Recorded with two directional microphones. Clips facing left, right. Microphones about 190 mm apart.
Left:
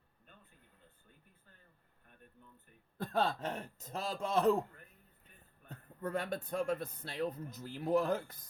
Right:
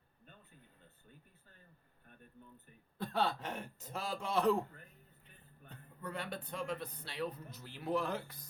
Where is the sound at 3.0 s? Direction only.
45° left (ahead or behind).